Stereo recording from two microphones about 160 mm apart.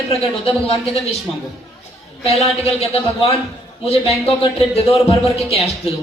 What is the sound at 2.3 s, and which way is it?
Speech, 40° left (ahead or behind).